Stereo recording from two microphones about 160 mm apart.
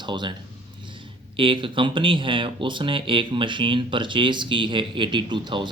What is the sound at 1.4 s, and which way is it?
Speech, 30° right (ahead or behind).